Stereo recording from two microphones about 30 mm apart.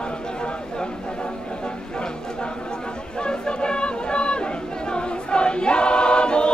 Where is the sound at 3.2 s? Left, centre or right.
Left.